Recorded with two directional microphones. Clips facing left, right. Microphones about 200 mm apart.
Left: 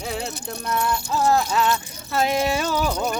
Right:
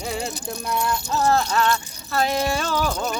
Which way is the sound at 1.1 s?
10° left (ahead or behind).